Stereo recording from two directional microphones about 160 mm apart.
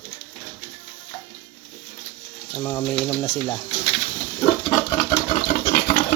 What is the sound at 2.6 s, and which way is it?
Speech, 15° left (ahead or behind).